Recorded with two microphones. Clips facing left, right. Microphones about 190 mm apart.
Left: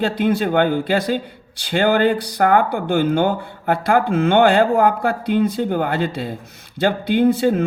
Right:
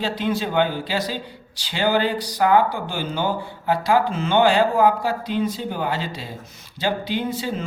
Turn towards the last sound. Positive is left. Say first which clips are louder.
# left 10 dB
turn(degrees=55)  # may be behind; listen again after turning